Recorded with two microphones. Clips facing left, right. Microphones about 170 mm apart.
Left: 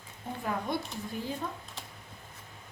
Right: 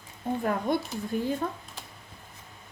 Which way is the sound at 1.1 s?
55° right (ahead or behind).